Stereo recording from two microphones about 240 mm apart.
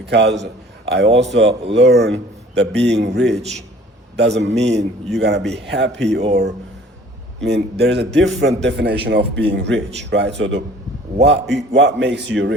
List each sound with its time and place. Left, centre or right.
0.0 s a man's voice: right
1.0 s speech: right
1.7 s a man's voice: right
7.4 s a man's voice: right